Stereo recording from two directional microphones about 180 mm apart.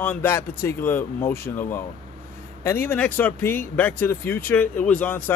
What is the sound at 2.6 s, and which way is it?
Speech, 10° left (ahead or behind).